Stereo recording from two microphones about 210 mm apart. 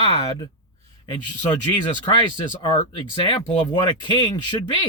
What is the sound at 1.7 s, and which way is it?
Speech, 20° left (ahead or behind).